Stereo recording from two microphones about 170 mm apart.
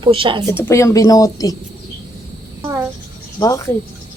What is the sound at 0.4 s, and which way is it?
A woman's voice, 15° left (ahead or behind).